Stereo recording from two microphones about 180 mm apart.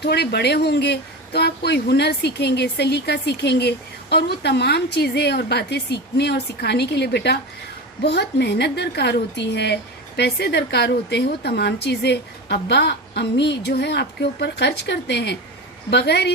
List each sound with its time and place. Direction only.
0.0 s speech: 65° left (ahead or behind)